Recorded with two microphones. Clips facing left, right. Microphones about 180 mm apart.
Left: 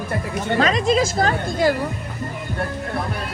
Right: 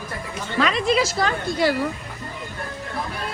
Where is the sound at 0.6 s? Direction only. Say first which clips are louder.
Left 1 dB; 45° left (ahead or behind).